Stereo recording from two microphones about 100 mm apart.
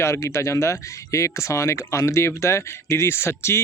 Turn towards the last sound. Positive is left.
turn(degrees=25)  # may be behind; listen again after turning